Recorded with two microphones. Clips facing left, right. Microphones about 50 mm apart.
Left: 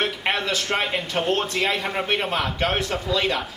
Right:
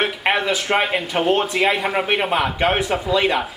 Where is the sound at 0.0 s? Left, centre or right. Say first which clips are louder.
Right 4 dB; centre.